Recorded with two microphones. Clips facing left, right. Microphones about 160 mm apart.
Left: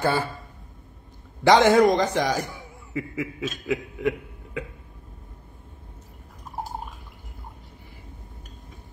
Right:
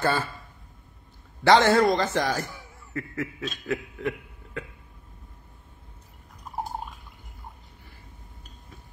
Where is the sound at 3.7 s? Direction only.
10° left (ahead or behind).